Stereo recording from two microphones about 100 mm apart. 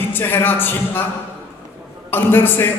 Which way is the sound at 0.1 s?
20° left (ahead or behind).